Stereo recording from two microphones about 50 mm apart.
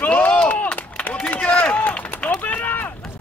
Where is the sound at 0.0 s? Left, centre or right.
Left.